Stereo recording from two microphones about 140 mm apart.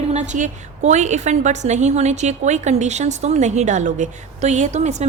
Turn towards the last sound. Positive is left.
turn(degrees=-55)  # may be behind; listen again after turning